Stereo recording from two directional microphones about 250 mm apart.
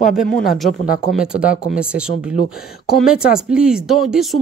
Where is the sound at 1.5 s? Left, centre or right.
Left.